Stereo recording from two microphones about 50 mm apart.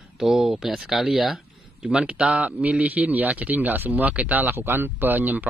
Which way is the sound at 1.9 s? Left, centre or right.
Centre.